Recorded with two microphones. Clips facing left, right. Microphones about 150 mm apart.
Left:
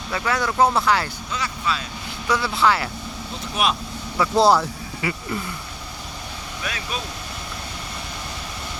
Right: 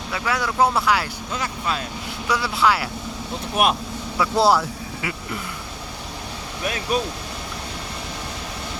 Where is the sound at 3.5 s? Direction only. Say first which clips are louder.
Right 3 dB; 50° right (ahead or behind).